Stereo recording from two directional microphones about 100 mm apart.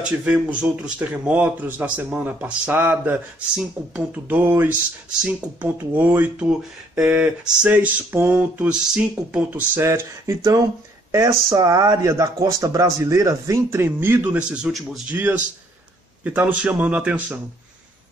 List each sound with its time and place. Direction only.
0.0 s speech: 15° right (ahead or behind)
9.8 s speech: 25° right (ahead or behind)
13.7 s speech: 20° right (ahead or behind)
14.6 s speech: 5° right (ahead or behind)
16.3 s speech: 15° right (ahead or behind)